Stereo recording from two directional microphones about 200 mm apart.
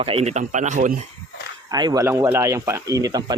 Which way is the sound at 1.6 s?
20° right (ahead or behind).